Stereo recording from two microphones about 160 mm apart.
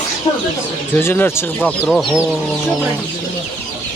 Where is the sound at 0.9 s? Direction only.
15° left (ahead or behind).